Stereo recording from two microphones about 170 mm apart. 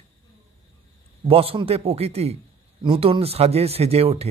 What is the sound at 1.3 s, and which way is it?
A man's voice, 35° right (ahead or behind).